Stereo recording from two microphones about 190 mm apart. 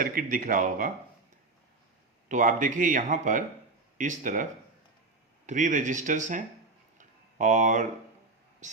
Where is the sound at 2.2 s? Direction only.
45° right (ahead or behind).